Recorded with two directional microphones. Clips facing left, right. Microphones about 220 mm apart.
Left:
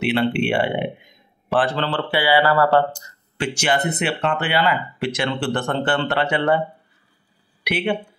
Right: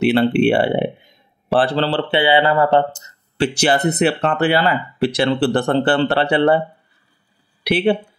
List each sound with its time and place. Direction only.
0.0 s speech: 40° right (ahead or behind); by 3.4 s 20° right (ahead or behind)
3.4 s speech: 35° right (ahead or behind)
7.6 s speech: 35° right (ahead or behind)